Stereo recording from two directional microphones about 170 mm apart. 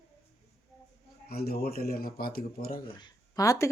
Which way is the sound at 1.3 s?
65° left (ahead or behind).